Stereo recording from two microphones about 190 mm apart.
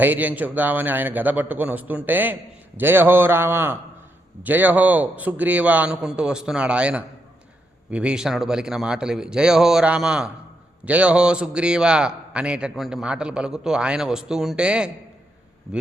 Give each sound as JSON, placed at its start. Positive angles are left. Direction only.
{"t": 0.0, "sound": "a man's voice", "side_deg": -10}